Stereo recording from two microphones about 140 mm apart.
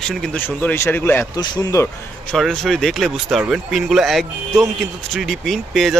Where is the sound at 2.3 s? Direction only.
5° left (ahead or behind).